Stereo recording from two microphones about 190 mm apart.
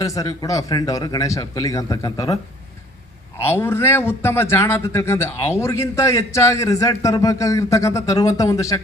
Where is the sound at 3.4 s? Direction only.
10° left (ahead or behind).